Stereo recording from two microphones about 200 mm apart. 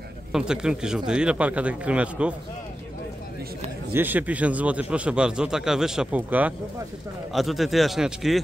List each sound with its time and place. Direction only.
0.3 s speech: 5° right (ahead or behind)
3.9 s a man's voice: 10° right (ahead or behind)